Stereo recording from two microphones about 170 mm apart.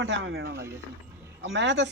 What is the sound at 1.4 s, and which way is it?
Speech, 90° right.